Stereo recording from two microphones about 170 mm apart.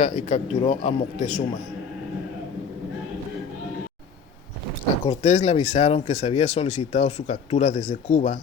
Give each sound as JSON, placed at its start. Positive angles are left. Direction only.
{"t": 0.0, "sound": "speech", "side_deg": 45}
{"t": 5.0, "sound": "speech", "side_deg": 40}